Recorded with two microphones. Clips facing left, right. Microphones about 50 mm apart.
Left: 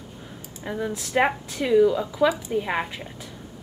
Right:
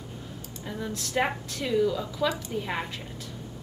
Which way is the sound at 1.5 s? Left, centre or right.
Centre.